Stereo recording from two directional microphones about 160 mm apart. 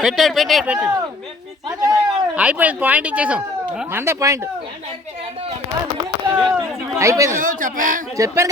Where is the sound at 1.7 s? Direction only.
20° right (ahead or behind).